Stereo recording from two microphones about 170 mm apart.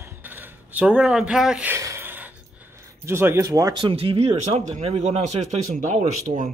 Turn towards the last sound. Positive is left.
turn(degrees=-50)  # may be behind; listen again after turning